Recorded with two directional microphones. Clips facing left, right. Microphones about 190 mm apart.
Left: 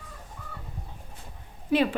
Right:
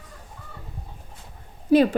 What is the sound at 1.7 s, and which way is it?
Speech, 35° right (ahead or behind).